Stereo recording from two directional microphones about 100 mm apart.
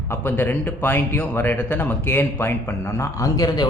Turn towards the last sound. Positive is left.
turn(degrees=40)  # may be behind; listen again after turning